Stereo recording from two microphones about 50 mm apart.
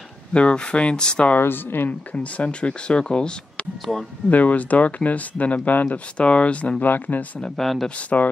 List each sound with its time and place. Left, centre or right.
0.3 s speech: left
1.4 s speech: left
1.9 s speech: left
4.3 s speech: left
6.8 s speech: left
7.5 s speech: centre
8.1 s speech: left